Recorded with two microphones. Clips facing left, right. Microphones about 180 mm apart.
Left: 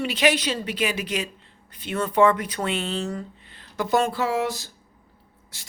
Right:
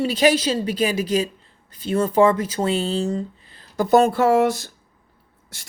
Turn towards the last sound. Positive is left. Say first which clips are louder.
# right 8 dB
turn(degrees=-50)  # may be behind; listen again after turning